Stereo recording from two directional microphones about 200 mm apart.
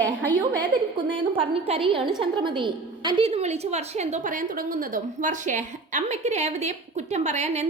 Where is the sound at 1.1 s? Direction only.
25° right (ahead or behind).